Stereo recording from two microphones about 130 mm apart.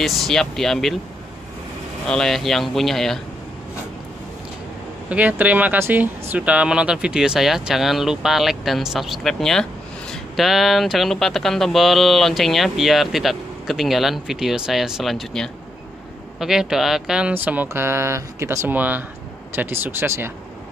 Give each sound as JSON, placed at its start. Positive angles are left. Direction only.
{"t": 0.0, "sound": "speech", "side_deg": 0}
{"t": 2.0, "sound": "speech", "side_deg": 5}
{"t": 5.1, "sound": "speech", "side_deg": -10}